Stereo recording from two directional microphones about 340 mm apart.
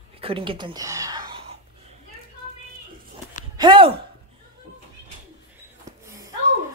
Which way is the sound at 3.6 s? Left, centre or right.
Centre.